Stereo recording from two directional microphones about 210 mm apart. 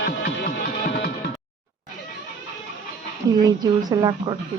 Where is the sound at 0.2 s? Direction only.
50° left (ahead or behind).